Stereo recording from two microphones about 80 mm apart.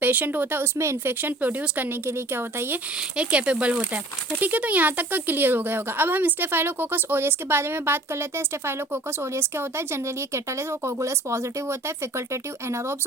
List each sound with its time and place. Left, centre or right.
0.0 s speech: right
3.2 s speech: centre; by 13.0 s right